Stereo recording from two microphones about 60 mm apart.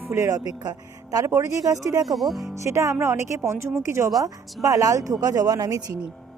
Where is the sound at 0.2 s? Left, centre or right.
Right.